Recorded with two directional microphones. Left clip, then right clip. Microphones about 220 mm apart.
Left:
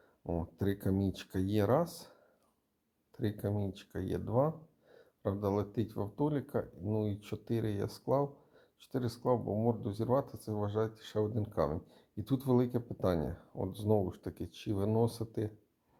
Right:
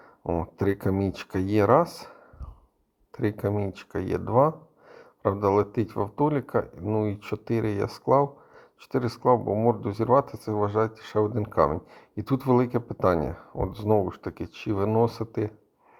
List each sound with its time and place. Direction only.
0.3 s speech: 20° right (ahead or behind)